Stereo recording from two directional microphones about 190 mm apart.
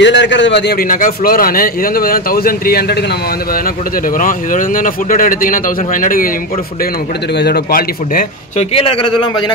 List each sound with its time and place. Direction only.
0.0 s a man's voice: 70° left (ahead or behind)
4.2 s a man's voice: 45° left (ahead or behind)
7.3 s a man's voice: 60° left (ahead or behind)
8.7 s speech: 30° left (ahead or behind)